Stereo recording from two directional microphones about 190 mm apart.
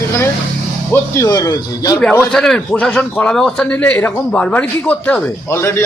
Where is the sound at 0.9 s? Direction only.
15° left (ahead or behind).